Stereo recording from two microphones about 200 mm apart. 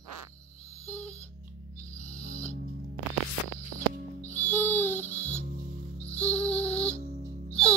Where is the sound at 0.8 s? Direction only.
5° left (ahead or behind).